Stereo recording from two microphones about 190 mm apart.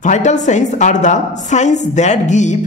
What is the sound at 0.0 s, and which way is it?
Speech, 40° left (ahead or behind).